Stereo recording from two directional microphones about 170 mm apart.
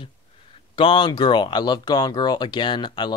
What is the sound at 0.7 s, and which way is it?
Speech, 30° left (ahead or behind).